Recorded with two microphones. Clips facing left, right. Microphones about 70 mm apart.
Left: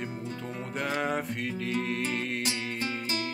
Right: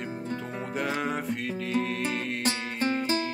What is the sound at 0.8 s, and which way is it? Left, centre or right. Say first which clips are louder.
Music: left 1 dB; centre.